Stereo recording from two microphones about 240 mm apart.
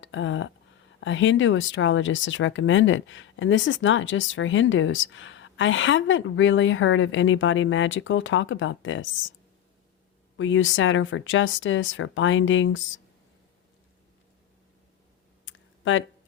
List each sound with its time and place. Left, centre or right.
0.0 s speech: left
10.3 s speech: left
15.4 s a sound: left